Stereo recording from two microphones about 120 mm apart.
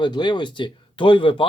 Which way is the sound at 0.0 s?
40° left (ahead or behind).